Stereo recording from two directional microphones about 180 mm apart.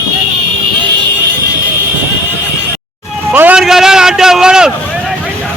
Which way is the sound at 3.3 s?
10° right (ahead or behind).